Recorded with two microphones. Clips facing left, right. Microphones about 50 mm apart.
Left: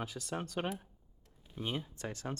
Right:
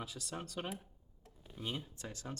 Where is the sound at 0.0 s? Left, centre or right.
Left.